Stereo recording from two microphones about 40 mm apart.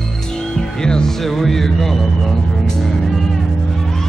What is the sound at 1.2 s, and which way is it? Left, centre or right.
Speech, centre.